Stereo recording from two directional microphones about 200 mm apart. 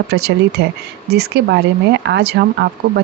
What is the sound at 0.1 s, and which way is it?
Speech, 55° right (ahead or behind).